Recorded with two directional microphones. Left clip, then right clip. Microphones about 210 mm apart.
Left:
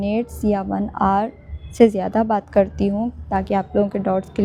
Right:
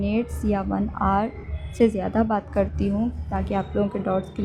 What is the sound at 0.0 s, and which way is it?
A woman's voice, 30° left (ahead or behind).